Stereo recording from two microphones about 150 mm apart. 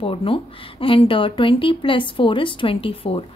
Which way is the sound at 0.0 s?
35° left (ahead or behind).